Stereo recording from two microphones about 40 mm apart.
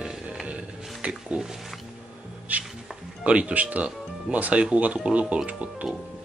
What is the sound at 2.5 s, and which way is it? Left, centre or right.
Speech, right.